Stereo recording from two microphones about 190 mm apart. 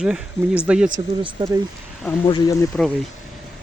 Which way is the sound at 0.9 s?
25° right (ahead or behind).